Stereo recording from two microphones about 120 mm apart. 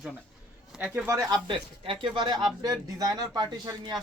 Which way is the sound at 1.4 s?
45° right (ahead or behind).